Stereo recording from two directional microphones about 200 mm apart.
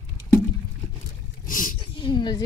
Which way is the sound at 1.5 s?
45° left (ahead or behind).